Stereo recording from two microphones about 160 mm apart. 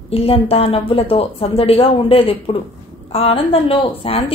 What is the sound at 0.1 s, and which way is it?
A woman's voice, 35° left (ahead or behind).